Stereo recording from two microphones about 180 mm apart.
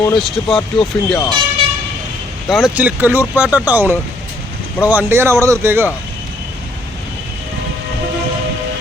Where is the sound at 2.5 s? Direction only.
Centre (ahead or behind).